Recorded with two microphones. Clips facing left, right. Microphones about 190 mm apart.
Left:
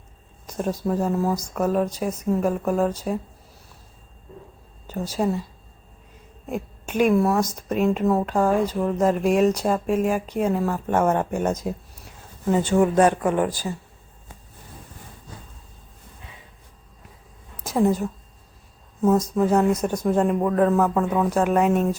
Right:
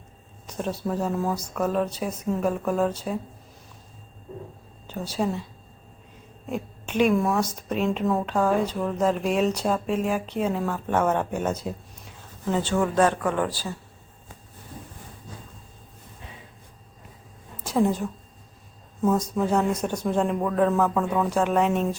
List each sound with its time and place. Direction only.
0.4 s speech: 10° left (ahead or behind)
4.9 s speech: 10° left (ahead or behind)
6.5 s speech: 5° left (ahead or behind)
17.6 s a woman's voice: 5° left (ahead or behind)